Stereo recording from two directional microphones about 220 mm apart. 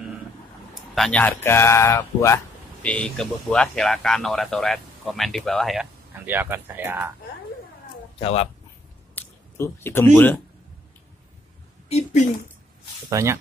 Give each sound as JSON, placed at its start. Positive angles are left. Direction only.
{"t": 0.9, "sound": "speech", "side_deg": 5}
{"t": 8.2, "sound": "speech", "side_deg": 25}
{"t": 9.1, "sound": "speech", "side_deg": 10}
{"t": 11.9, "sound": "speech", "side_deg": 30}
{"t": 13.1, "sound": "speech", "side_deg": -15}